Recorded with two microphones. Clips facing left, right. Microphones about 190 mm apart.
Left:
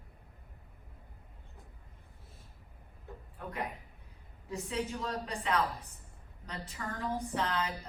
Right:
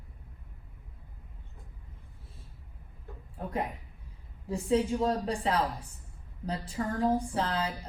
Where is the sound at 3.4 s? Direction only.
30° right (ahead or behind).